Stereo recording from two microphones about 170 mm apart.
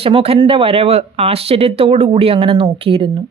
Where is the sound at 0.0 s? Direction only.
35° right (ahead or behind).